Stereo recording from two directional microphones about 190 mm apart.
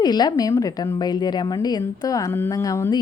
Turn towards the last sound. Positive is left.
turn(degrees=15)  # may be behind; listen again after turning